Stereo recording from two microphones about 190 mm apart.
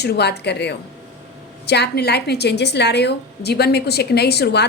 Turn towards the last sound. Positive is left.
turn(degrees=60)  # may be behind; listen again after turning